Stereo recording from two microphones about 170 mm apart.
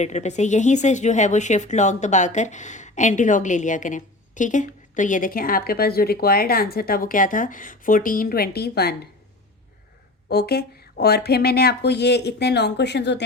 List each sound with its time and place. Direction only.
0.0 s speech: 45° left (ahead or behind); by 9.0 s 70° left (ahead or behind)
10.2 s speech: 70° left (ahead or behind); by 13.2 s 90° left